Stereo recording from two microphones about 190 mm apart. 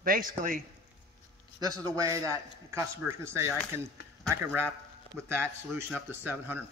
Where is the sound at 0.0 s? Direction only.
50° right (ahead or behind).